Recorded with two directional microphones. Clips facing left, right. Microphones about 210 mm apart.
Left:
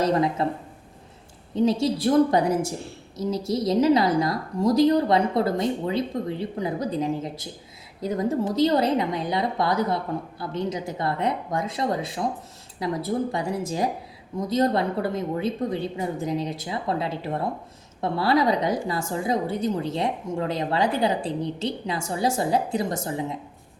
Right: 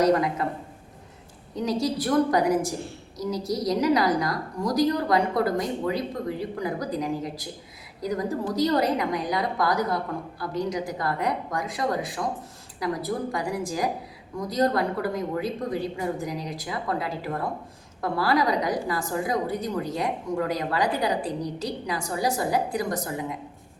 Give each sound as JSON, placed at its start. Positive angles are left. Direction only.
{"t": 0.0, "sound": "a woman's voice", "side_deg": 25}
{"t": 1.5, "sound": "a woman's voice", "side_deg": 25}